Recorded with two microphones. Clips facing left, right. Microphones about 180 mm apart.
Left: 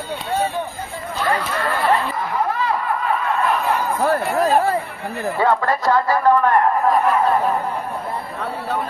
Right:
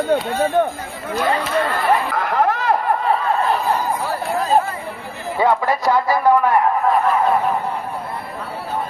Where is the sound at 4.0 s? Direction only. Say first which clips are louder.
Left 4 dB; 60° left (ahead or behind).